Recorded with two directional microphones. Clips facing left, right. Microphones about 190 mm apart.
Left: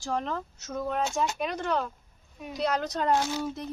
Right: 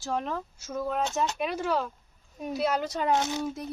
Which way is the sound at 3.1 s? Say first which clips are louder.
Even; 20° right (ahead or behind).